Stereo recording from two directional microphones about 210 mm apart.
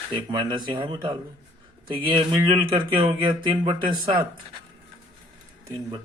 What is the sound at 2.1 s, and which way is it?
Speech, 20° right (ahead or behind).